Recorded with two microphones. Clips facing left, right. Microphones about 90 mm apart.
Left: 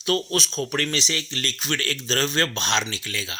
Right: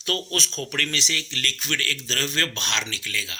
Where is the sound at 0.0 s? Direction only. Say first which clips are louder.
Left 4 dB; 10° left (ahead or behind).